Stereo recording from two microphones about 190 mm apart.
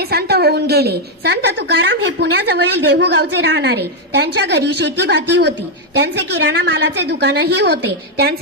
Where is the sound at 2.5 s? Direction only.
60° right (ahead or behind).